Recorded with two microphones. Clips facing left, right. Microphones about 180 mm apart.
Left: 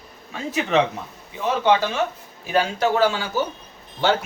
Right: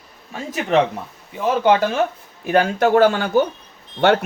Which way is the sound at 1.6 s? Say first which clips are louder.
Right 3 dB; 50° right (ahead or behind).